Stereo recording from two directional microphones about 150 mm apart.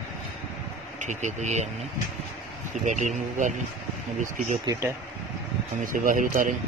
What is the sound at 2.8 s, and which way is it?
Speech, 50° right (ahead or behind).